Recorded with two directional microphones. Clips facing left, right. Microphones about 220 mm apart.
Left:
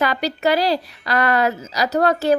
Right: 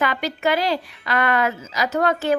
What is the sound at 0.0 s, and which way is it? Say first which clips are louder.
A woman's voice: left 2 dB; 35° left (ahead or behind).